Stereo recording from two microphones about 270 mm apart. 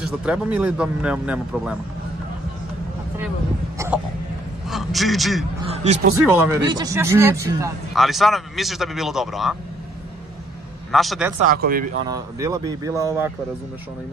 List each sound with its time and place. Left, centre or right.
0.0 s speech: centre
3.7 s hiccup: centre
4.6 s a sound: centre
6.2 s speech: centre
10.9 s speech: centre
11.5 s speech: right
12.1 s speech: centre